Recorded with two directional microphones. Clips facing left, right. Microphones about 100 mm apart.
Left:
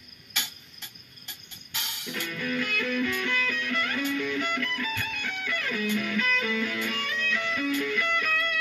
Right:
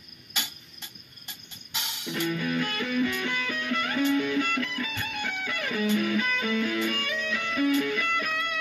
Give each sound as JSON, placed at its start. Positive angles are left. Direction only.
{"t": 0.3, "sound": "music", "side_deg": -20}